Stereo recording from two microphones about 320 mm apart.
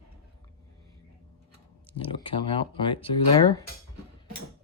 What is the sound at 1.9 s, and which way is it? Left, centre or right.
Speech, centre.